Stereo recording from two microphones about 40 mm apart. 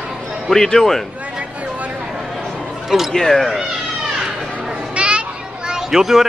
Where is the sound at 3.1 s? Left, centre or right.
Centre.